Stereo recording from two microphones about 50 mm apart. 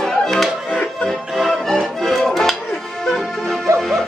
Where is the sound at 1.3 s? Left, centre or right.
Centre.